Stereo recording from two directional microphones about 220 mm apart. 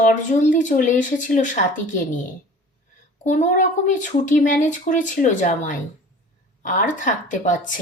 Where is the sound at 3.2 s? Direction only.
35° left (ahead or behind).